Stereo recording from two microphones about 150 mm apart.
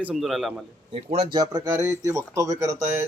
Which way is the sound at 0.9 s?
40° right (ahead or behind).